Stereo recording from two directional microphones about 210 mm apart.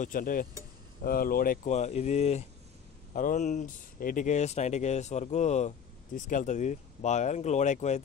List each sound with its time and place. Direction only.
0.0 s speech: 40° left (ahead or behind)